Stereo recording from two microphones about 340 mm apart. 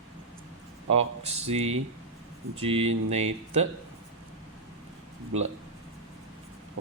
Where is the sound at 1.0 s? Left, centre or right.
Centre.